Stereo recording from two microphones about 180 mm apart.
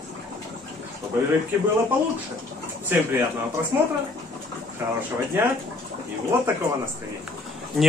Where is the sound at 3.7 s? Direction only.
15° right (ahead or behind).